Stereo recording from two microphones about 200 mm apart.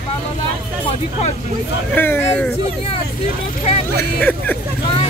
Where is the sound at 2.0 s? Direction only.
10° left (ahead or behind).